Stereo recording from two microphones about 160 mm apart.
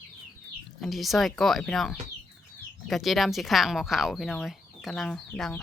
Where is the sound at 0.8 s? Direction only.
Centre (ahead or behind).